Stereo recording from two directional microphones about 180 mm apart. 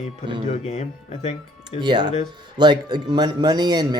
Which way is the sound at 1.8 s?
25° right (ahead or behind).